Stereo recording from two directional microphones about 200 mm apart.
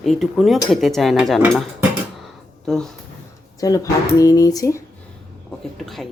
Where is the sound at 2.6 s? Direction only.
Centre (ahead or behind).